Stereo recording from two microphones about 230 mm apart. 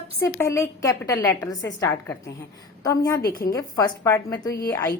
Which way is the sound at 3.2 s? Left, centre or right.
Left.